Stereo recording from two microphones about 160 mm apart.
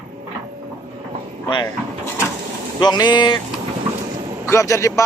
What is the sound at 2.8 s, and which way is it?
Speech, 25° left (ahead or behind).